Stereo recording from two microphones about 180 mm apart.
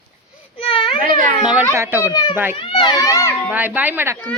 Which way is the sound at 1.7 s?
15° right (ahead or behind).